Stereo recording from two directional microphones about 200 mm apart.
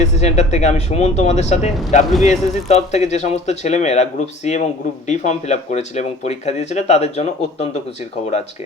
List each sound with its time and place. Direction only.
0.0 s speech: 35° left (ahead or behind)